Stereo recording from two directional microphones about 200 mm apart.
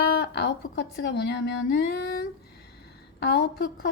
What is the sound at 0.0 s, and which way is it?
A woman's voice, 55° left (ahead or behind).